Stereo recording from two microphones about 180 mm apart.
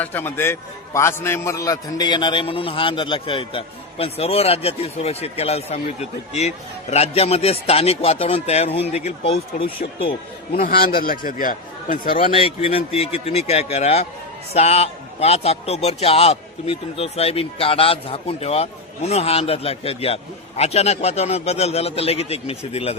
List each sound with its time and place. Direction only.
0.0 s a man's voice: 10° left (ahead or behind); by 9.4 s 35° left (ahead or behind)
10.5 s speech: 55° left (ahead or behind)
12.2 s a man's voice: 30° left (ahead or behind)